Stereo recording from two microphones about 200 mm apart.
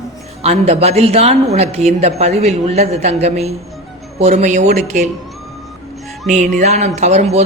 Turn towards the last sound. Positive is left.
turn(degrees=-35)  # may be behind; listen again after turning